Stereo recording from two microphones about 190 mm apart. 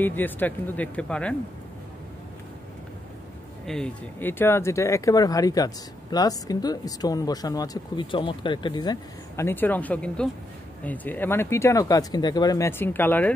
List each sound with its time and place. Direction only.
0.0 s speech: 10° left (ahead or behind)
3.6 s speech: 5° left (ahead or behind); by 8.9 s 25° left (ahead or behind)
9.4 s speech: 10° left (ahead or behind)